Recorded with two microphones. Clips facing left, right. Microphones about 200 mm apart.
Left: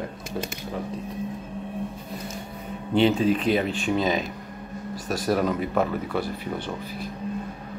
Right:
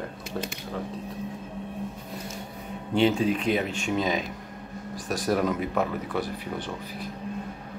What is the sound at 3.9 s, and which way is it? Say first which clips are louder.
Speech: left 2 dB; 5° left (ahead or behind).